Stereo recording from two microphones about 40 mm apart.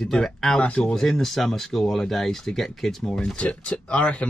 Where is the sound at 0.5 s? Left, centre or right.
Left.